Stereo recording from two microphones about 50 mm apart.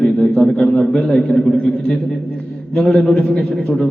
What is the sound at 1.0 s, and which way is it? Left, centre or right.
Speech, centre.